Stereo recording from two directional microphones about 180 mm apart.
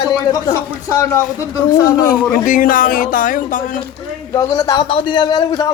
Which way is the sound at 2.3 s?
50° left (ahead or behind).